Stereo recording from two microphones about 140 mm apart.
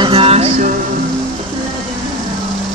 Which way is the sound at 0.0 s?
45° right (ahead or behind).